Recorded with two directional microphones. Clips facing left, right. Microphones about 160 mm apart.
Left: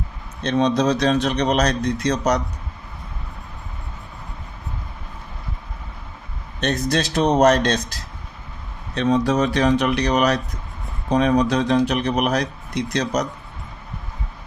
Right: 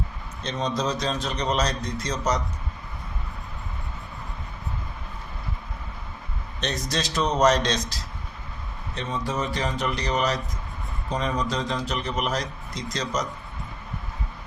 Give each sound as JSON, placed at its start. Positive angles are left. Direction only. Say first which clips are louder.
{"t": 0.4, "sound": "a man's voice", "louder": "left 9 dB", "side_deg": 65}
{"t": 6.6, "sound": "a man's voice", "louder": "left 7 dB", "side_deg": 55}
{"t": 9.0, "sound": "a man's voice", "louder": "left 11 dB", "side_deg": 75}